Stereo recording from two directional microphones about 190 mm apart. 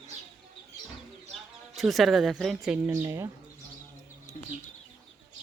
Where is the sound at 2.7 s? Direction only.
15° right (ahead or behind).